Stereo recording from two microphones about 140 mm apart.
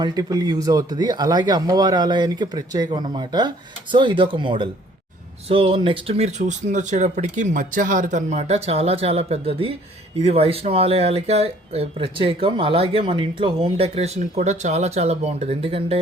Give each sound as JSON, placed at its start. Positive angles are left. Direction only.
{"t": 0.0, "sound": "speech", "side_deg": -30}